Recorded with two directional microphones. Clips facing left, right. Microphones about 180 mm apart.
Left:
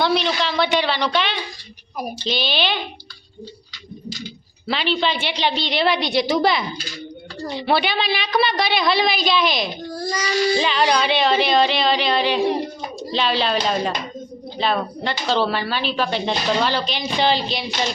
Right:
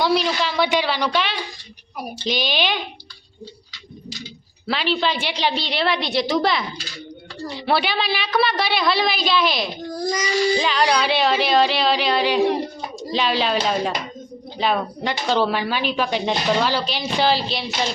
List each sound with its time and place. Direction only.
0.0 s speech: 5° right (ahead or behind)
4.6 s a woman's voice: 5° right (ahead or behind)
7.7 s a woman's voice: 5° right (ahead or behind)
9.9 s speech: 15° right (ahead or behind)
10.6 s a woman's voice: centre (ahead or behind)